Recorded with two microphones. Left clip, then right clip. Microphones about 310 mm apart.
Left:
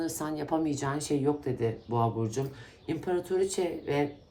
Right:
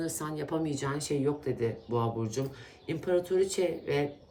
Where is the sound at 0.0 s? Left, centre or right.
Centre.